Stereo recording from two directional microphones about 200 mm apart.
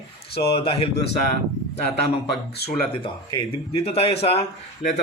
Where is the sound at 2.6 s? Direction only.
55° left (ahead or behind).